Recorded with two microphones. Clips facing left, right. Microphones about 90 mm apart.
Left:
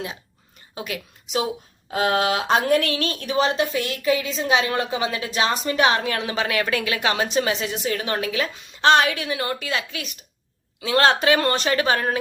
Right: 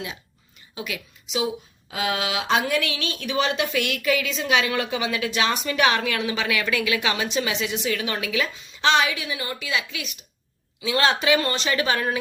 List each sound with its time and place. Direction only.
0.8 s speech: 45° left (ahead or behind)
8.5 s speech: 50° left (ahead or behind)